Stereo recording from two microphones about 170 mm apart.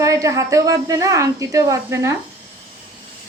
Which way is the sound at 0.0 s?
20° right (ahead or behind).